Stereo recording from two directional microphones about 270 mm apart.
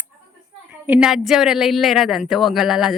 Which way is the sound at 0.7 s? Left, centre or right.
Centre.